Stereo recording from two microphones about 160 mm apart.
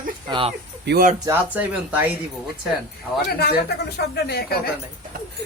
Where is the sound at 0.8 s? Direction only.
70° right (ahead or behind).